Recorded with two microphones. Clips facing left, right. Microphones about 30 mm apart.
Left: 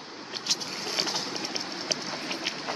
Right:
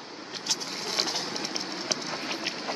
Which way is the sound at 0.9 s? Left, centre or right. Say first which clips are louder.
Even; centre.